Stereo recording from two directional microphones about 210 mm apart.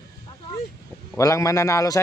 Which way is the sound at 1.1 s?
15° left (ahead or behind).